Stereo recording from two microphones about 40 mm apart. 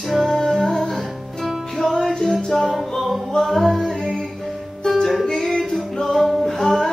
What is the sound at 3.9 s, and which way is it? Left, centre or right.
Music, centre.